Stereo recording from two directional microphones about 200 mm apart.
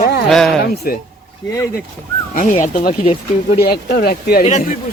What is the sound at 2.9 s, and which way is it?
Speech, 30° left (ahead or behind).